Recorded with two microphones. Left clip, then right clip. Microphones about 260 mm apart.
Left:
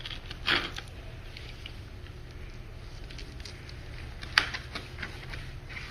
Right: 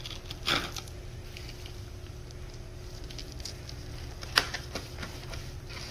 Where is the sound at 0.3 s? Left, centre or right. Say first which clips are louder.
Left 2 dB; centre.